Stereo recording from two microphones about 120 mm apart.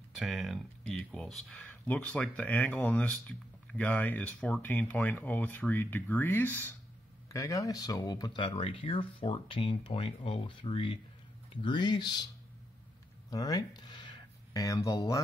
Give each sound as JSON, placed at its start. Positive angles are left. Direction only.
{"t": 0.1, "sound": "speech", "side_deg": 0}
{"t": 7.2, "sound": "speech", "side_deg": 30}
{"t": 13.3, "sound": "speech", "side_deg": 30}